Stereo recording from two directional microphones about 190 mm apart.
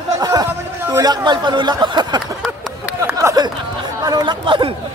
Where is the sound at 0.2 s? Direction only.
20° right (ahead or behind).